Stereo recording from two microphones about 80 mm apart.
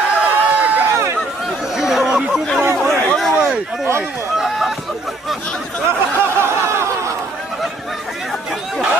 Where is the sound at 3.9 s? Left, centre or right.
Right.